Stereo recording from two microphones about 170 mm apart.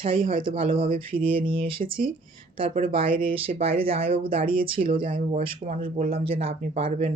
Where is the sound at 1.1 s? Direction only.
30° right (ahead or behind).